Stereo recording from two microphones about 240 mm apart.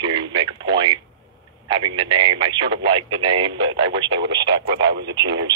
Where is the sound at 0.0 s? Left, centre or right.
Centre.